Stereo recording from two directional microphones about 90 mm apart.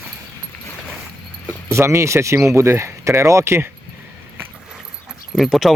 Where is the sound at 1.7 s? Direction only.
35° right (ahead or behind).